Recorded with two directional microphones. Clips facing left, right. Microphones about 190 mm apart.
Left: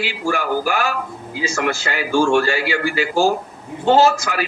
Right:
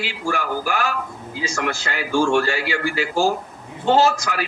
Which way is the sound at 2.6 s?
5° left (ahead or behind).